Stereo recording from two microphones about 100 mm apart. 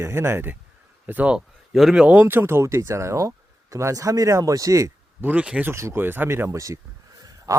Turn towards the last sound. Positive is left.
turn(degrees=-35)  # may be behind; listen again after turning